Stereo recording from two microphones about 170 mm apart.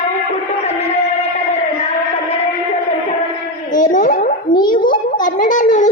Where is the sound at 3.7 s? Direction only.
50° left (ahead or behind).